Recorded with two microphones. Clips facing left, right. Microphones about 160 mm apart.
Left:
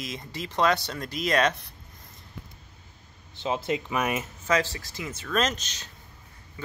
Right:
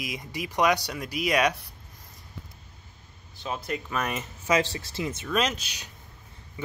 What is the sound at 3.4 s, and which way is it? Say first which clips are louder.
Speech: left 4 dB; 20° left (ahead or behind).